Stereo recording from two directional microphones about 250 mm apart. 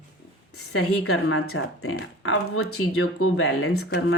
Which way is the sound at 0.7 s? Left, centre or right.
Left.